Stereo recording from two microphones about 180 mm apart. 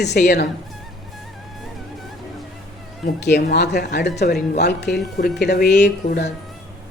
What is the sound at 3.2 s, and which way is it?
Speech, 70° left (ahead or behind).